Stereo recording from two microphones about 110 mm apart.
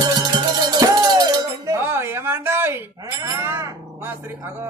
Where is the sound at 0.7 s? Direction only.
35° right (ahead or behind).